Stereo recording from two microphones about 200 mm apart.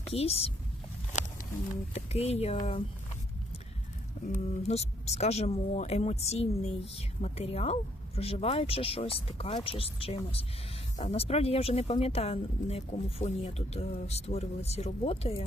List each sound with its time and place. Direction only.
0.1 s speech: 30° left (ahead or behind)
1.9 s speech: 30° left (ahead or behind)
4.3 s speech: 30° left (ahead or behind)